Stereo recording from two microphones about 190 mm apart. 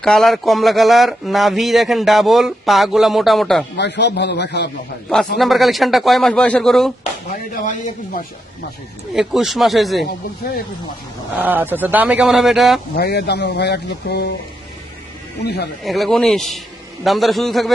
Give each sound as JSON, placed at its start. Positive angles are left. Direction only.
{"t": 0.0, "sound": "speech", "side_deg": 0}
{"t": 3.8, "sound": "speech", "side_deg": 65}
{"t": 5.4, "sound": "speech", "side_deg": 0}
{"t": 7.0, "sound": "speech", "side_deg": 40}
{"t": 9.1, "sound": "speech", "side_deg": 0}
{"t": 11.3, "sound": "speech", "side_deg": -10}
{"t": 13.0, "sound": "speech", "side_deg": 55}
{"t": 15.4, "sound": "speech", "side_deg": 65}
{"t": 15.8, "sound": "speech", "side_deg": 0}